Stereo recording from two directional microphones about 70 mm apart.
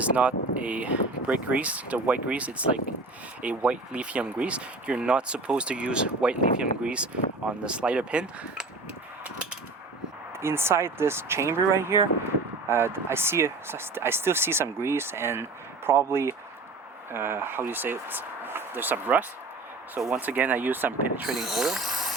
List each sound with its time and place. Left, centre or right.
0.0 s speech: centre
10.4 s speech: right
21.2 s speech: centre